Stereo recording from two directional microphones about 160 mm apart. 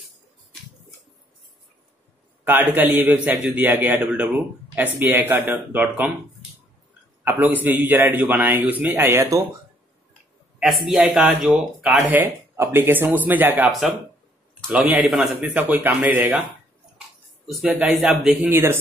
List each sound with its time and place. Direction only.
2.7 s speech: 10° right (ahead or behind)
7.2 s speech: 10° right (ahead or behind)
10.6 s speech: centre (ahead or behind)
17.5 s speech: 5° right (ahead or behind)
18.5 s speech: 15° right (ahead or behind)